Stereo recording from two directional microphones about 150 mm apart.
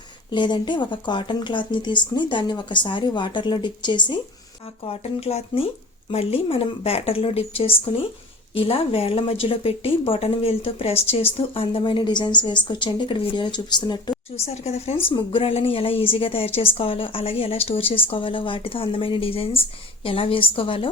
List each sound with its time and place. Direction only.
0.3 s a woman's voice: 30° left (ahead or behind)
4.9 s a woman's voice: 45° left (ahead or behind)
14.4 s a woman's voice: 45° left (ahead or behind)